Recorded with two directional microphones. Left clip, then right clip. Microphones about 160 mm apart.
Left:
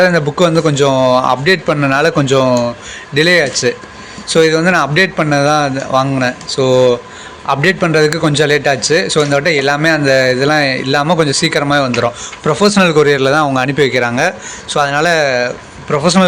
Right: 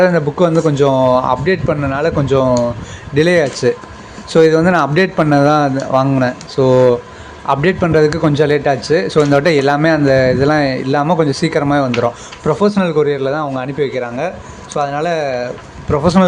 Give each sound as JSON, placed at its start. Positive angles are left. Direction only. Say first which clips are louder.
{"t": 0.0, "sound": "a man's voice", "louder": "left 1 dB", "side_deg": -10}
{"t": 3.2, "sound": "a man's voice", "louder": "left 2 dB", "side_deg": -20}
{"t": 11.3, "sound": "a man's voice", "louder": "left 2 dB", "side_deg": -20}